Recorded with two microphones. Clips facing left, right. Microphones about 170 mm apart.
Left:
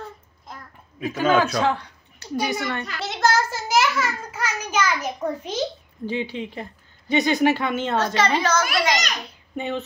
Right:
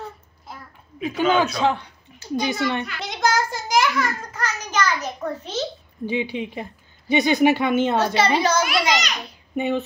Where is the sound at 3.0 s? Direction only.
Centre (ahead or behind).